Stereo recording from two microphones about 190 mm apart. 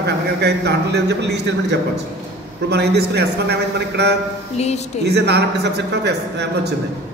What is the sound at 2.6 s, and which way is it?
A man's voice, 60° right (ahead or behind).